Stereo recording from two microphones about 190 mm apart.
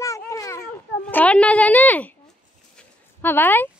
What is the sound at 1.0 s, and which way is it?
A child's voice, 5° left (ahead or behind).